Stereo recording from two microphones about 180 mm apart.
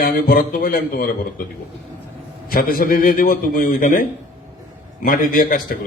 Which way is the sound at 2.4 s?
55° left (ahead or behind).